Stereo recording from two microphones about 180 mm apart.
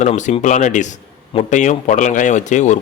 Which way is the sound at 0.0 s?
40° left (ahead or behind).